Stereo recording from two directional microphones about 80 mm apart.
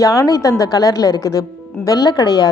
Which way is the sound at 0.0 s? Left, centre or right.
Left.